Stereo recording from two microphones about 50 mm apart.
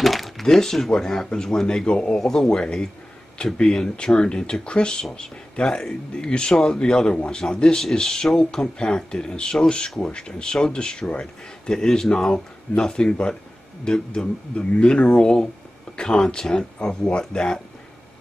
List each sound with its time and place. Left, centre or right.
0.0 s speech: centre